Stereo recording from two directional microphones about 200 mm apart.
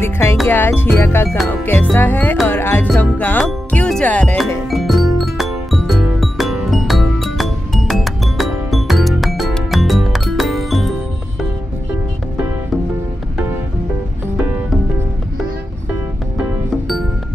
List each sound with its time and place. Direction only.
0.0 s music: 15° left (ahead or behind)
0.5 s speech: 10° left (ahead or behind)
1.7 s music: 10° left (ahead or behind)